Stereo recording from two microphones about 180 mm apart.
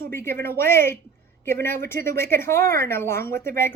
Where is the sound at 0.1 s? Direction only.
15° left (ahead or behind).